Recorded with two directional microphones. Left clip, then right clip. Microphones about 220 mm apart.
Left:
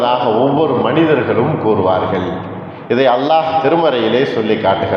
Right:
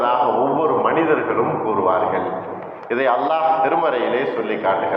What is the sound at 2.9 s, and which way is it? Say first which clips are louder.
A man's voice: left 6 dB; 55° left (ahead or behind).